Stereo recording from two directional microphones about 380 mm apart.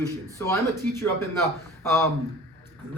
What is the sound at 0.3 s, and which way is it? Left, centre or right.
A man's voice, centre.